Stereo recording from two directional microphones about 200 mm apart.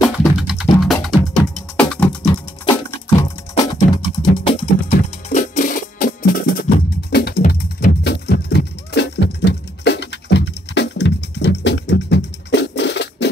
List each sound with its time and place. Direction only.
0.0 s music: centre (ahead or behind)
2.0 s music: 20° left (ahead or behind)
4.9 s music: 40° left (ahead or behind); by 13.3 s 60° left (ahead or behind)